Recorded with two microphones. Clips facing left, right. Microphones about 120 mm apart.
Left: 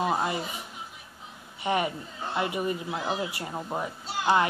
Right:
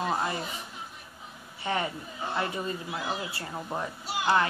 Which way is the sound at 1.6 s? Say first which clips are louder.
Left 3 dB; 15° left (ahead or behind).